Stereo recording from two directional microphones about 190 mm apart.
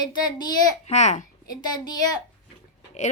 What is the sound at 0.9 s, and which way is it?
Speech, 35° left (ahead or behind).